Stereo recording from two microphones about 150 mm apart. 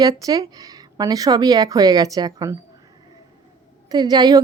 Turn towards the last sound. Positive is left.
turn(degrees=-25)  # may be behind; listen again after turning